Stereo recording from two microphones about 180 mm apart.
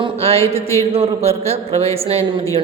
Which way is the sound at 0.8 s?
35° right (ahead or behind).